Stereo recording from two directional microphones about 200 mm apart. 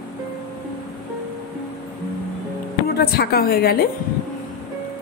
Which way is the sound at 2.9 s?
50° left (ahead or behind).